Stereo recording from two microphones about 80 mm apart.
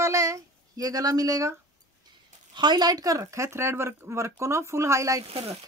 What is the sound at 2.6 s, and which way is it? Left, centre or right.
Speech, right.